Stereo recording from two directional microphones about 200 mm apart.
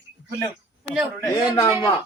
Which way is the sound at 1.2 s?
20° left (ahead or behind).